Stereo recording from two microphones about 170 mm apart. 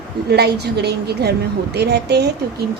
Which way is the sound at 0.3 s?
75° right (ahead or behind).